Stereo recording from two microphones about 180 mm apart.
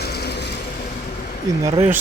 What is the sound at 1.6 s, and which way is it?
Speech, 15° right (ahead or behind).